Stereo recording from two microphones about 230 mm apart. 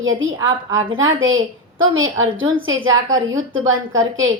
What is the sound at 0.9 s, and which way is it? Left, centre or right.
A woman's voice, right.